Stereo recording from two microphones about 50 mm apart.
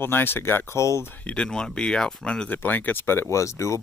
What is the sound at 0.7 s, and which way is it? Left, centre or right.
Speech, left.